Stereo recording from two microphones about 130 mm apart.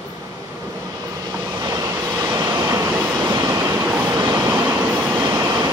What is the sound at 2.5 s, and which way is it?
Vehicle, 20° right (ahead or behind).